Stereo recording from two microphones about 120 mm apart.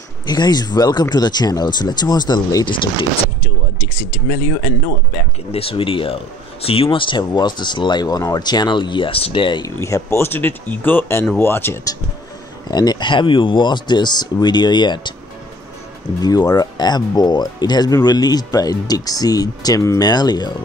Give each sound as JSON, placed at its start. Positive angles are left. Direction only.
{"t": 0.3, "sound": "speech", "side_deg": 35}
{"t": 5.5, "sound": "speech", "side_deg": 50}
{"t": 9.8, "sound": "speech", "side_deg": 25}
{"t": 12.7, "sound": "speech", "side_deg": 35}
{"t": 16.2, "sound": "speech", "side_deg": 35}